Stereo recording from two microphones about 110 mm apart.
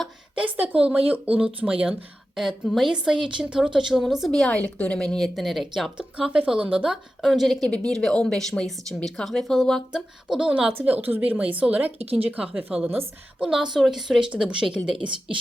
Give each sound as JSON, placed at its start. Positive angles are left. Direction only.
{"t": 0.3, "sound": "a woman's voice", "side_deg": -10}
{"t": 13.7, "sound": "a woman's voice", "side_deg": 0}